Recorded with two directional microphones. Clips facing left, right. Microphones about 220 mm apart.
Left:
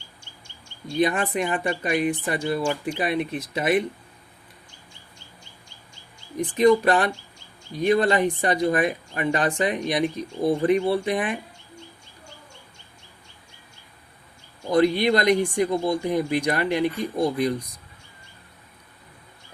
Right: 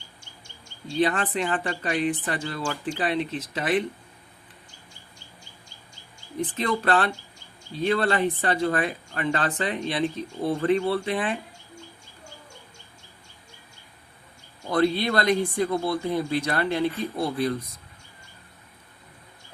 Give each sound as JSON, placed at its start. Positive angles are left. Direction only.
{"t": 0.9, "sound": "speech", "side_deg": 10}
{"t": 6.3, "sound": "speech", "side_deg": 15}
{"t": 14.7, "sound": "speech", "side_deg": 15}